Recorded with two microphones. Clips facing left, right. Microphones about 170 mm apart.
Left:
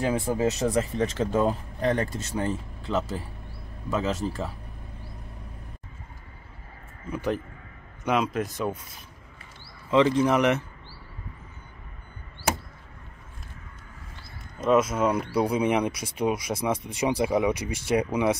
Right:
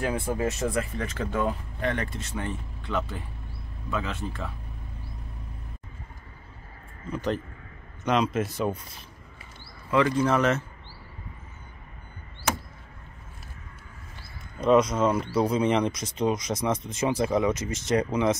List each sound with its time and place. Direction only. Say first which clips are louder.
0.6 s speech: left 4 dB; 35° left (ahead or behind)
7.1 s speech: even; 10° left (ahead or behind)
9.8 s speech: left 2 dB; 20° left (ahead or behind)
14.6 s speech: right 1 dB; 5° left (ahead or behind)